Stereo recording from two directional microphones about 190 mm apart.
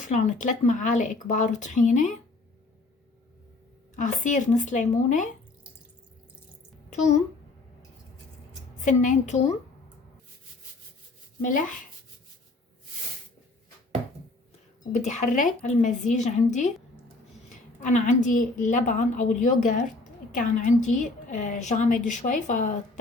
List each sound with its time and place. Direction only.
0.0 s a woman's voice: 40° left (ahead or behind)
3.9 s a woman's voice: 40° left (ahead or behind)
8.8 s a woman's voice: 40° left (ahead or behind)
11.4 s speech: 45° left (ahead or behind)
14.9 s a woman's voice: 40° left (ahead or behind)